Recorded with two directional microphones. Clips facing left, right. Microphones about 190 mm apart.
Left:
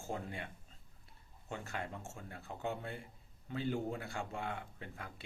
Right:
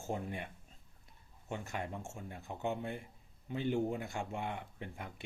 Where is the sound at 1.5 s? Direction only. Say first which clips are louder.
Right 2 dB; 20° right (ahead or behind).